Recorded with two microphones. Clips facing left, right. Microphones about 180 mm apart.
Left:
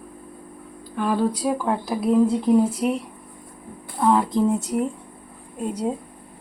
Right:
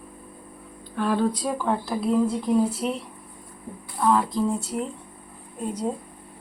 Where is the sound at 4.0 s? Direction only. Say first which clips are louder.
Left 3 dB; 20° left (ahead or behind).